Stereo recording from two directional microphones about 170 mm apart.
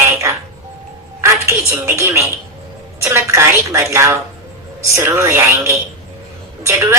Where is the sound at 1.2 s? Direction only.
15° right (ahead or behind).